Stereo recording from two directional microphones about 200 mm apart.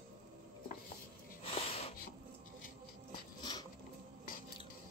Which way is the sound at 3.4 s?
20° left (ahead or behind).